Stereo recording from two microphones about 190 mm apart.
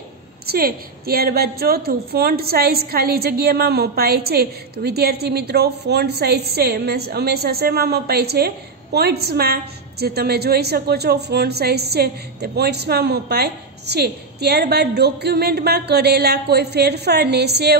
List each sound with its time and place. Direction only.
0.5 s a woman's voice: 50° right (ahead or behind)